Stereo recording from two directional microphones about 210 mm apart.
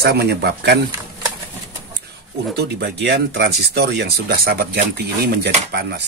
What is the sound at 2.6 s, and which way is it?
Speech, 55° right (ahead or behind).